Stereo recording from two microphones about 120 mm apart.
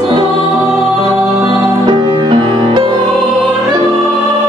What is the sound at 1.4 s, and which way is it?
Music, 40° right (ahead or behind).